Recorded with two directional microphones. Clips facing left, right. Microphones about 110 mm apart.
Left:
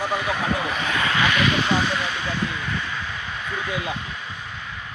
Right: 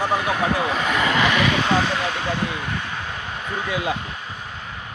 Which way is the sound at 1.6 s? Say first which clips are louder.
Right 2 dB; 55° right (ahead or behind).